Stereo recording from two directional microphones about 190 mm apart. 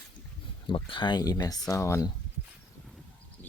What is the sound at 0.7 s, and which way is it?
Speech, 25° left (ahead or behind).